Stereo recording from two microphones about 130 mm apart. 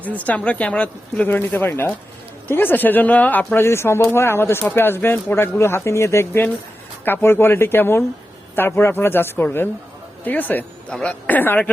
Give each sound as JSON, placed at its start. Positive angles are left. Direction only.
{"t": 0.0, "sound": "speech", "side_deg": 10}